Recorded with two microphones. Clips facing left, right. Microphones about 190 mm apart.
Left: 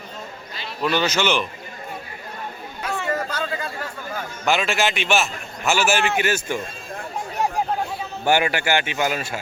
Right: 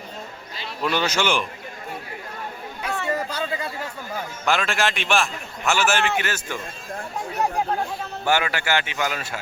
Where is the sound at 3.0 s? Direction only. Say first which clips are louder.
Even; 15° right (ahead or behind).